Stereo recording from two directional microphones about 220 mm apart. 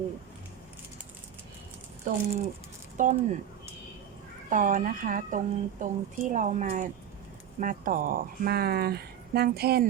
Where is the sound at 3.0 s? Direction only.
35° right (ahead or behind).